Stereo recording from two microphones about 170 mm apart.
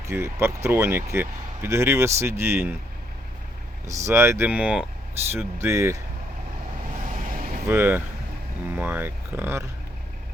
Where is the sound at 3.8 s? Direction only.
15° right (ahead or behind).